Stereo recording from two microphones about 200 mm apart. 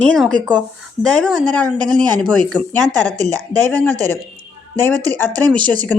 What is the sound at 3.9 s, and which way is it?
Speech, 15° right (ahead or behind).